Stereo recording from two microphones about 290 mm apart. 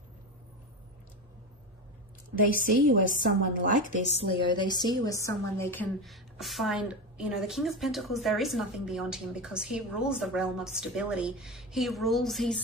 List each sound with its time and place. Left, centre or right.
2.6 s a woman's voice: right
3.0 s a woman's voice: left
3.3 s a woman's voice: right
4.3 s a woman's voice: centre